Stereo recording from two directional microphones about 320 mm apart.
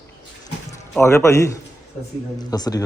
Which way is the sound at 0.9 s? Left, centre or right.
Centre.